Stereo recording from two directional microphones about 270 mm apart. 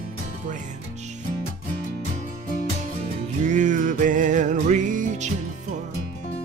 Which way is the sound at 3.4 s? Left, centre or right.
Right.